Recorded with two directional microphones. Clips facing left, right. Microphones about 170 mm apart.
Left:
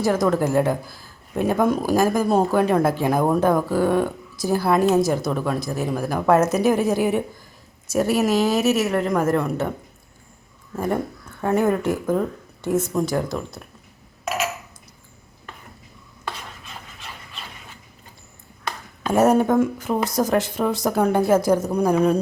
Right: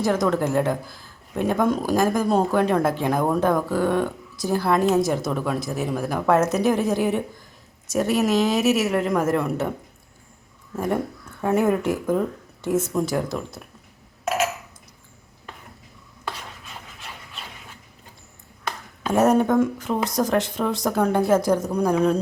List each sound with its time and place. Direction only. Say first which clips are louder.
0.0 s speech: left 2 dB; 5° left (ahead or behind)
10.8 s speech: left 1 dB; centre (ahead or behind)
19.1 s speech: left 1 dB; 5° left (ahead or behind)